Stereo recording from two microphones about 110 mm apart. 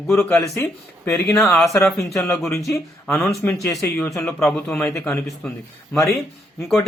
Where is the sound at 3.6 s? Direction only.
Centre (ahead or behind).